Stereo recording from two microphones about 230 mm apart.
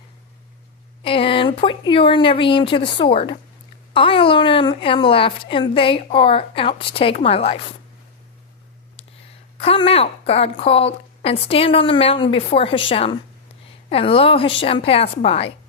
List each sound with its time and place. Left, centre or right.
1.0 s a woman's voice: left
9.6 s a woman's voice: left